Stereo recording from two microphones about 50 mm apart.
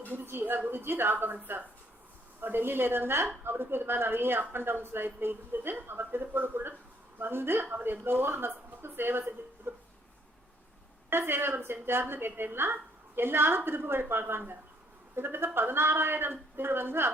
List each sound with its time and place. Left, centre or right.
0.1 s speech: right
11.1 s speech: right